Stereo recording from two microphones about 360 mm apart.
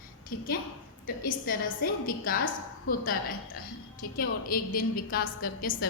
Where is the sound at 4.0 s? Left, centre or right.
Left.